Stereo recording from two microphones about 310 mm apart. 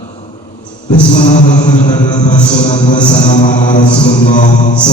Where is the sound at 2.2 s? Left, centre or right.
Left.